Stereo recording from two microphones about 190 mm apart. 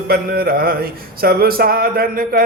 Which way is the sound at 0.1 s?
50° right (ahead or behind).